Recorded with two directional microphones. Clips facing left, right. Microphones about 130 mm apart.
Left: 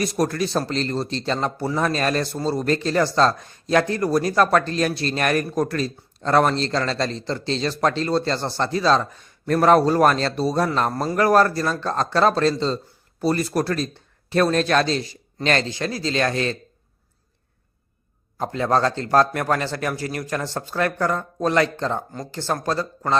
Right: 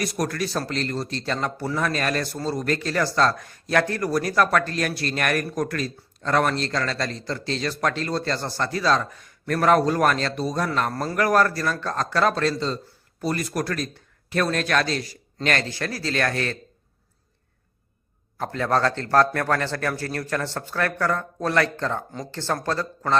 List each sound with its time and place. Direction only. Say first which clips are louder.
0.0 s speech: left 4 dB; 25° left (ahead or behind)
18.3 s a man's voice: left 2 dB; 20° left (ahead or behind)